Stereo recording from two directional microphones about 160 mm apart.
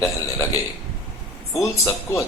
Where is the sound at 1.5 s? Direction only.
20° left (ahead or behind).